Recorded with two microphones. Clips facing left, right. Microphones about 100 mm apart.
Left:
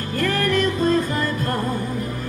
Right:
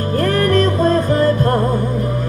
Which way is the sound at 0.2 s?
35° right (ahead or behind).